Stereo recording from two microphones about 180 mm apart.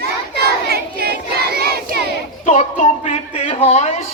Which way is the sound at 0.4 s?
60° right (ahead or behind).